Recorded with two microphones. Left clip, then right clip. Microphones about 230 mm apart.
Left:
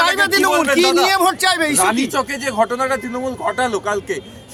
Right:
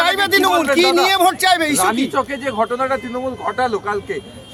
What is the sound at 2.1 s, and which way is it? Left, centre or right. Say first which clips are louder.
Speech: left 1 dB; left.